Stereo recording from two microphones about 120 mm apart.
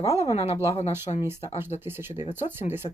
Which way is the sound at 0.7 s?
65° left (ahead or behind).